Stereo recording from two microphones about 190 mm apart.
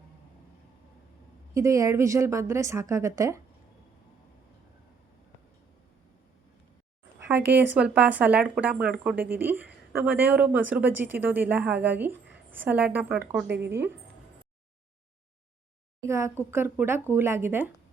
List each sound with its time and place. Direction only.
1.5 s a woman's voice: 15° right (ahead or behind)
7.7 s a woman's voice: 5° right (ahead or behind)
13.5 s speech: 60° right (ahead or behind)
16.0 s a woman's voice: 15° right (ahead or behind)